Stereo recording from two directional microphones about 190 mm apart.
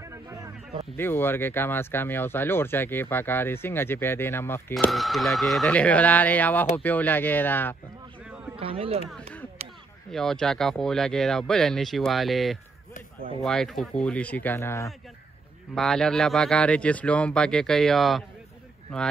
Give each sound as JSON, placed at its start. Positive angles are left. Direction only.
{"t": 0.0, "sound": "a sound", "side_deg": -15}
{"t": 0.9, "sound": "speech", "side_deg": 10}
{"t": 4.7, "sound": "speech", "side_deg": 0}
{"t": 8.5, "sound": "speech", "side_deg": -30}
{"t": 9.6, "sound": "a sound", "side_deg": -35}
{"t": 10.1, "sound": "a man's voice", "side_deg": 5}
{"t": 15.7, "sound": "a man's voice", "side_deg": 5}